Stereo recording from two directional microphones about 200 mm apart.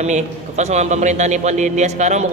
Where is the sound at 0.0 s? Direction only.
35° right (ahead or behind).